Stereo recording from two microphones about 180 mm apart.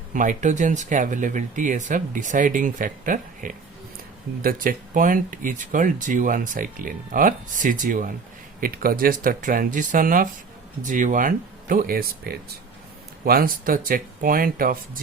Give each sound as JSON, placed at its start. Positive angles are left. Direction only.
{"t": 0.1, "sound": "speech", "side_deg": -45}